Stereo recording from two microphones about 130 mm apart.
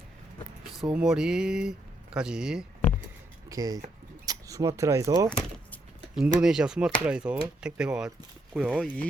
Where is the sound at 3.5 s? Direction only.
25° right (ahead or behind).